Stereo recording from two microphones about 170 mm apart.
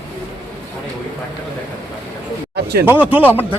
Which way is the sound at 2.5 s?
70° right (ahead or behind).